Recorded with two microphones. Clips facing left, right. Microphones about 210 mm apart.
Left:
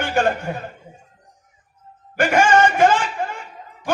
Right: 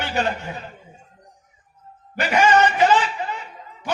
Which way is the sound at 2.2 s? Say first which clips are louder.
Left 2 dB; 50° left (ahead or behind).